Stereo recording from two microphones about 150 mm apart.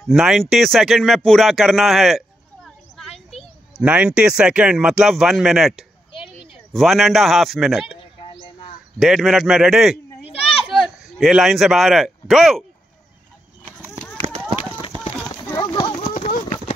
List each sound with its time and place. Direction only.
0.1 s speech: centre (ahead or behind)
9.0 s speech: centre (ahead or behind)
15.5 s clip-clop: 25° left (ahead or behind)
16.1 s clip-clop: 45° left (ahead or behind)